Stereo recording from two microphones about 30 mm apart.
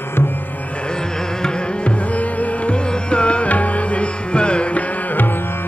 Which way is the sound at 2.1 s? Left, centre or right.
Left.